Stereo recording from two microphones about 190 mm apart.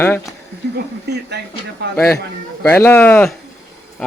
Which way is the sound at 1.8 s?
60° right (ahead or behind).